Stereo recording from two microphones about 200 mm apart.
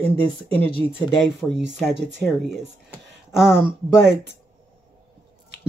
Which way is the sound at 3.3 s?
5° right (ahead or behind).